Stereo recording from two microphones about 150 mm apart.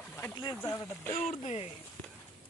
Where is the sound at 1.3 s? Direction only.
40° left (ahead or behind).